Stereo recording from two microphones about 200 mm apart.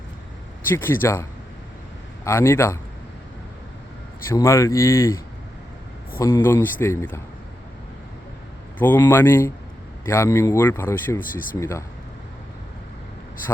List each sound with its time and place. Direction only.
0.7 s speech: 10° left (ahead or behind)
4.3 s speech: 15° left (ahead or behind)
8.8 s speech: 10° left (ahead or behind)
11.2 s speech: 45° left (ahead or behind)
11.6 s speech: 15° left (ahead or behind)